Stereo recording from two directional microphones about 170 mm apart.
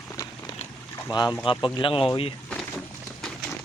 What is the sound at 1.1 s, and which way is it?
Speech, 25° left (ahead or behind).